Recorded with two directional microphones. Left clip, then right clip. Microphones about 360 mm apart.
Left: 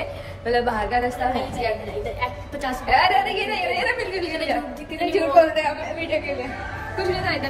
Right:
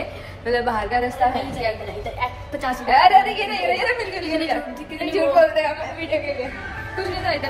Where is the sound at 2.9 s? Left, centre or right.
Centre.